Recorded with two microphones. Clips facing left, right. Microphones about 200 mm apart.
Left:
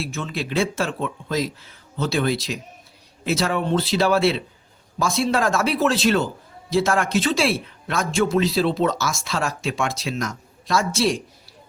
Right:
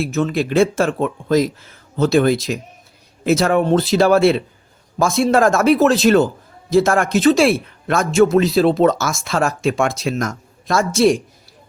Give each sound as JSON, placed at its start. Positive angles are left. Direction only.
{"t": 0.0, "sound": "speech", "side_deg": -45}